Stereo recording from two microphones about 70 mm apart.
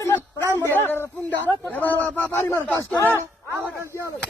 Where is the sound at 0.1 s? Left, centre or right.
Left.